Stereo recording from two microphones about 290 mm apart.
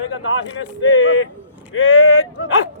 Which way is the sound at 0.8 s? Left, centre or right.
Left.